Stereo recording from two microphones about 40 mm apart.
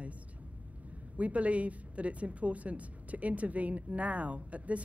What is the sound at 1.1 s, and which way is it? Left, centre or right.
Speech, right.